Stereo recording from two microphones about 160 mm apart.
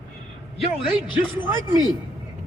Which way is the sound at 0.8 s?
30° left (ahead or behind).